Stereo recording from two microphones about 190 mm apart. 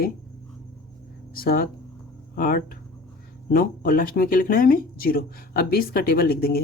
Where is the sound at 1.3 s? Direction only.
50° left (ahead or behind).